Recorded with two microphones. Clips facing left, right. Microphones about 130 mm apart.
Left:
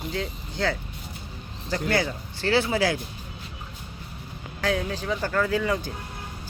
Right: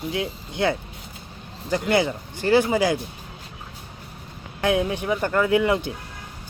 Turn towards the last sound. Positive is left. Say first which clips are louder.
# right 5 dB
turn(degrees=-20)  # may be behind; listen again after turning